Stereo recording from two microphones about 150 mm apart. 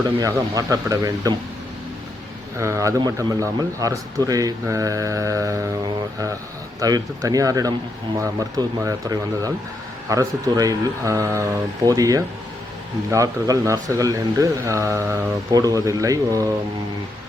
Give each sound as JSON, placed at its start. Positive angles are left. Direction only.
{"t": 0.2, "sound": "a man's voice", "side_deg": -25}
{"t": 2.6, "sound": "a man's voice", "side_deg": -20}